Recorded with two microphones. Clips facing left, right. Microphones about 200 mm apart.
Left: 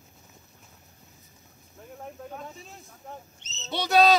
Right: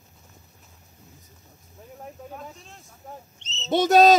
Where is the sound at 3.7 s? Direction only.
50° right (ahead or behind).